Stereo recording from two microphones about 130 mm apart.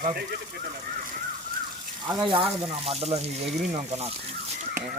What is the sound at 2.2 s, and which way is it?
Speech, 40° right (ahead or behind).